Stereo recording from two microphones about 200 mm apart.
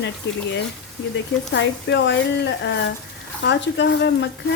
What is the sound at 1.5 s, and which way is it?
Speech, 60° left (ahead or behind).